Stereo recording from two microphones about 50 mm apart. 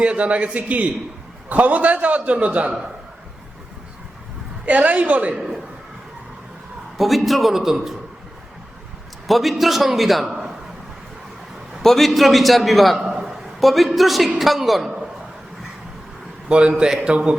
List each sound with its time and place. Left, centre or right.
0.0 s a man's voice: right
4.6 s a man's voice: right
5.3 s a man's voice: centre
6.9 s a man's voice: centre
9.2 s a man's voice: centre
10.3 s a sound: centre
11.8 s a man's voice: centre
13.1 s a sound: centre
14.3 s a man's voice: centre
16.5 s a man's voice: right